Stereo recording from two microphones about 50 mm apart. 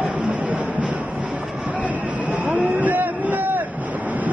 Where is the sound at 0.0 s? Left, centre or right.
Right.